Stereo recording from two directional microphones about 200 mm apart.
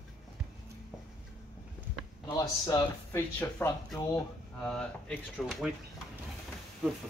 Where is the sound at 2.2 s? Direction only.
15° left (ahead or behind); by 5.7 s centre (ahead or behind).